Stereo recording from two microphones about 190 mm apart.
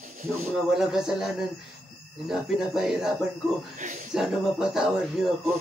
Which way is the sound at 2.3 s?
5° right (ahead or behind).